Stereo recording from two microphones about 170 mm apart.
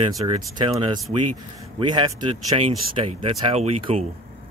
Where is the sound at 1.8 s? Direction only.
25° right (ahead or behind).